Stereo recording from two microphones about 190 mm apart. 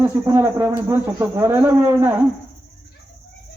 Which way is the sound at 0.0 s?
10° right (ahead or behind).